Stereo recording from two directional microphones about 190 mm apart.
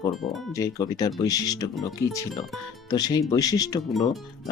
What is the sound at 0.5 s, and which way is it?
Speech, 20° left (ahead or behind).